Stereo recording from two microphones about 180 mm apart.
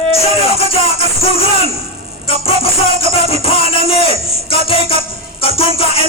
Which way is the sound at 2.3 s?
30° left (ahead or behind).